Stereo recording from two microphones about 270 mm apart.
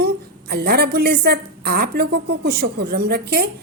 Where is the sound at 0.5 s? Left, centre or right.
Right.